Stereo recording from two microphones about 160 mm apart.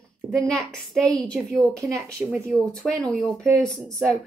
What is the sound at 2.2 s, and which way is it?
A woman's voice, 10° right (ahead or behind).